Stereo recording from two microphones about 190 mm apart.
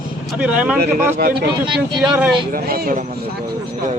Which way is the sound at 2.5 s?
50° right (ahead or behind).